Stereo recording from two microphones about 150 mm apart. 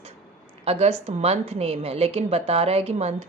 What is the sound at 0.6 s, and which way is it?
A woman's voice, 40° right (ahead or behind).